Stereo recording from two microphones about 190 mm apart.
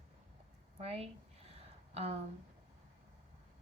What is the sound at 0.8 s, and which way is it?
Speech, 30° right (ahead or behind).